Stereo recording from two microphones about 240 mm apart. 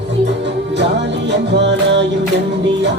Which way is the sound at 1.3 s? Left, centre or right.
Right.